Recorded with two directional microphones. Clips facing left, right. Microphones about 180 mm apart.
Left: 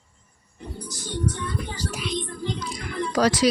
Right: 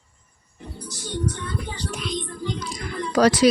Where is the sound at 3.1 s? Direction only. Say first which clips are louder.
Right 4 dB; 60° right (ahead or behind).